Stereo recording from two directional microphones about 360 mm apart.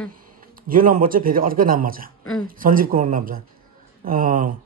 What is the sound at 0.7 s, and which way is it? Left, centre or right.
Speech, right.